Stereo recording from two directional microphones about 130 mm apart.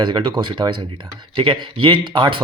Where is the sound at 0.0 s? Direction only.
40° right (ahead or behind).